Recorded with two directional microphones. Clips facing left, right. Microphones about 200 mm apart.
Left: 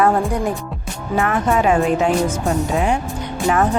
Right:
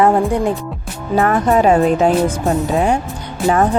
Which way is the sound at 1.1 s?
35° right (ahead or behind).